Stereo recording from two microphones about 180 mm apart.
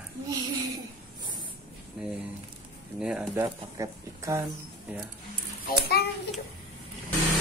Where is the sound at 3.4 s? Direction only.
20° right (ahead or behind).